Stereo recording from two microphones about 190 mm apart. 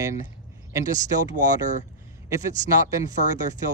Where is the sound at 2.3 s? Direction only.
15° right (ahead or behind).